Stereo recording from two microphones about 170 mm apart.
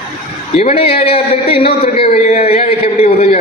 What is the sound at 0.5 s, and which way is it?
A man's voice, 35° left (ahead or behind).